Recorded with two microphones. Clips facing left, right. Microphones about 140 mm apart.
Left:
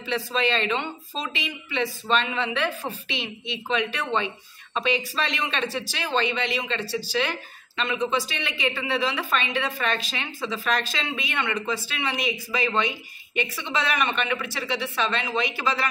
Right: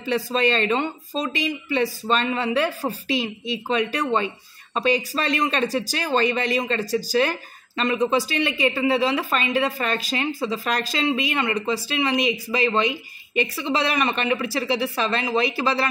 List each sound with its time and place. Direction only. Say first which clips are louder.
0.0 s speech: right 4 dB; 40° right (ahead or behind)